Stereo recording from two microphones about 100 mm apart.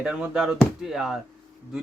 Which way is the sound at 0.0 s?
10° right (ahead or behind).